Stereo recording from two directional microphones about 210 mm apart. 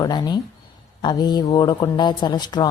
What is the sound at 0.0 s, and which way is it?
A woman's voice, 20° left (ahead or behind).